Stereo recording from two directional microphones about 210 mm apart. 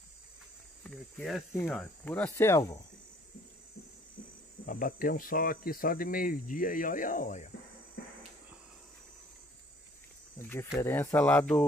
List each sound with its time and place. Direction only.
0.8 s cricket: centre (ahead or behind)
1.7 s speech: 5° left (ahead or behind)
4.6 s speech: 40° left (ahead or behind)
10.4 s speech: 10° left (ahead or behind)